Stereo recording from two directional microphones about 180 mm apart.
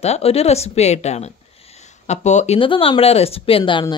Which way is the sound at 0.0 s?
35° left (ahead or behind).